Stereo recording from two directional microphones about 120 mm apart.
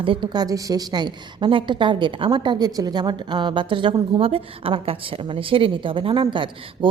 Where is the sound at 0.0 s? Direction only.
45° right (ahead or behind).